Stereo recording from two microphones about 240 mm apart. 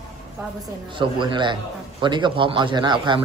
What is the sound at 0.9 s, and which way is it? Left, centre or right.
A man's voice, centre.